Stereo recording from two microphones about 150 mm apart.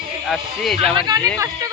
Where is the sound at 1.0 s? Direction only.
25° right (ahead or behind).